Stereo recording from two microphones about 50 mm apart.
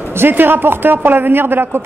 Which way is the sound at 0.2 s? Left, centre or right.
Right.